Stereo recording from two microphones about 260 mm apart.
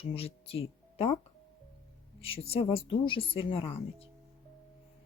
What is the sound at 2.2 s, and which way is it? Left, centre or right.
Speech, left.